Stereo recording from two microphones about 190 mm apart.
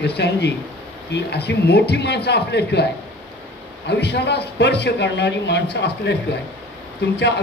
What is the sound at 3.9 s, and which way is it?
A man's voice, 60° left (ahead or behind).